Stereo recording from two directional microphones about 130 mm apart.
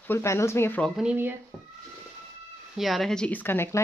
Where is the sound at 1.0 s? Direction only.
10° right (ahead or behind).